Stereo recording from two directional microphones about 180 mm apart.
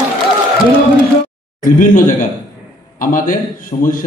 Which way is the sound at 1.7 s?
50° left (ahead or behind).